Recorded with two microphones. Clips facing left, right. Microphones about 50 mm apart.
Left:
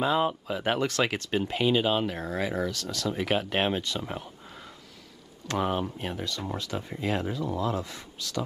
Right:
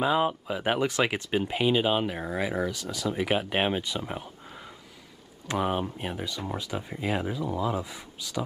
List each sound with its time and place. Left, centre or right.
0.0 s speech: centre
5.5 s speech: centre